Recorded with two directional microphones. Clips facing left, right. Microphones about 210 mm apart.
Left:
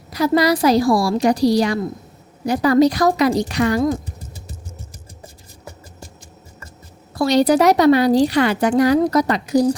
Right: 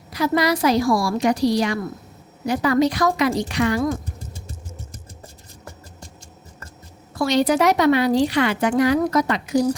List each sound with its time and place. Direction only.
0.1 s a woman's voice: 35° left (ahead or behind)
7.1 s a woman's voice: 35° left (ahead or behind)